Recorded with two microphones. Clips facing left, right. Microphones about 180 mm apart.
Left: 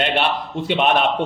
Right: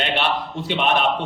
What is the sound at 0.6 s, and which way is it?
Speech, 50° left (ahead or behind).